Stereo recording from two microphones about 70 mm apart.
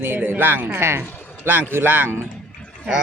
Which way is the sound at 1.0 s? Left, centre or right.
Left.